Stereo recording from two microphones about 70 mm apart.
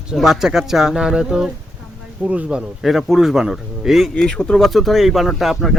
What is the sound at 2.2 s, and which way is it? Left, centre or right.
Speech, centre.